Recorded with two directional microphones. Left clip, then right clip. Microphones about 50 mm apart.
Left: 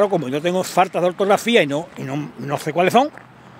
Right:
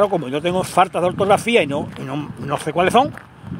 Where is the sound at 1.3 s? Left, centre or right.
Left.